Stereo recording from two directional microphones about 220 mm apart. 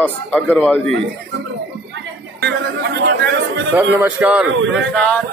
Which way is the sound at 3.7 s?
5° right (ahead or behind).